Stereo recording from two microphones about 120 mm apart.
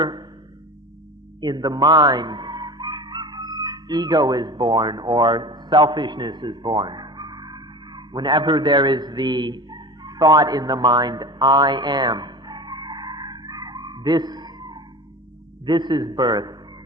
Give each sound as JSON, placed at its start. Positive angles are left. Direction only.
{"t": 0.0, "sound": "music", "side_deg": -35}
{"t": 1.4, "sound": "chicken", "side_deg": -35}
{"t": 15.6, "sound": "a man's voice", "side_deg": -40}